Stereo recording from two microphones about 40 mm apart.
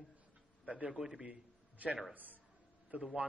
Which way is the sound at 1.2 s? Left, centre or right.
Right.